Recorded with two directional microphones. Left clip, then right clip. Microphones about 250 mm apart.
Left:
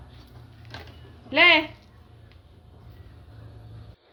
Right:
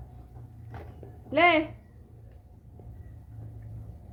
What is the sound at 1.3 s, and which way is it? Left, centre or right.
Speech, left.